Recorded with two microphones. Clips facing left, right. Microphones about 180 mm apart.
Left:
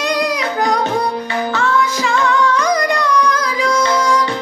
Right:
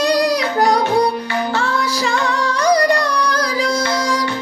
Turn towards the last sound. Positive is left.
turn(degrees=-35)  # may be behind; listen again after turning